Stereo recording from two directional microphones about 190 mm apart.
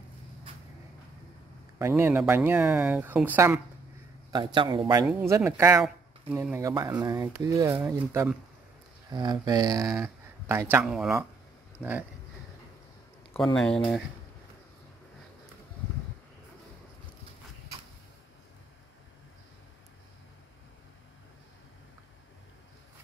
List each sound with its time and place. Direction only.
1.8 s speech: 15° right (ahead or behind)
4.6 s speech: 25° right (ahead or behind)
9.1 s speech: 25° right (ahead or behind); by 11.9 s centre (ahead or behind)
13.6 s speech: 5° left (ahead or behind)